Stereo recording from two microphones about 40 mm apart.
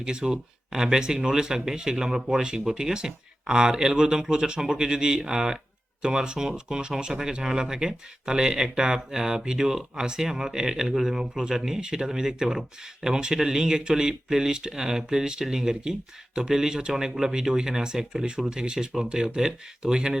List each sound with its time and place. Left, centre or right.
0.0 s speech: centre